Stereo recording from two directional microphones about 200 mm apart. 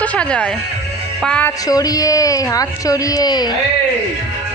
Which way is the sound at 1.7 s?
20° left (ahead or behind).